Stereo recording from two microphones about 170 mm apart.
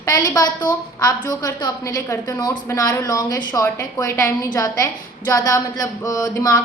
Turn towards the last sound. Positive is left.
turn(degrees=20)  # may be behind; listen again after turning